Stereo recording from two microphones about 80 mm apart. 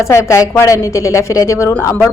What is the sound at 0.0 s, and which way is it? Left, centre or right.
A woman's voice, left.